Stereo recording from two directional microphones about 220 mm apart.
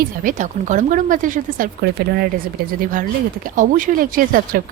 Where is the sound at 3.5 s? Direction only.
35° right (ahead or behind).